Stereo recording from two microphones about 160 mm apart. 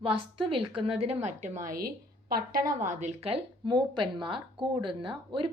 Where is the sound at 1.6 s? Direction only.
65° right (ahead or behind).